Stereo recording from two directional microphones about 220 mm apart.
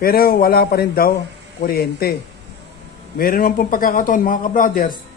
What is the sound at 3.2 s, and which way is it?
Speech, 40° left (ahead or behind).